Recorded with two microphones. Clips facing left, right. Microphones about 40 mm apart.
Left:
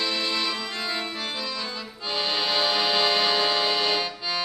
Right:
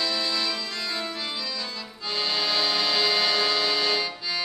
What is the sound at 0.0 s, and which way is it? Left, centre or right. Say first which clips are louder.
Accordion: left 1 dB; left.